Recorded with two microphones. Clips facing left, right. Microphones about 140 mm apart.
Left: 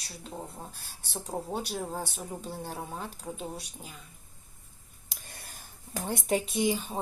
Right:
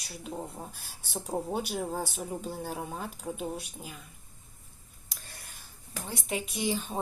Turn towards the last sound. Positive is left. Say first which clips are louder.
# right 1 dB
turn(degrees=0)  # may be behind; listen again after turning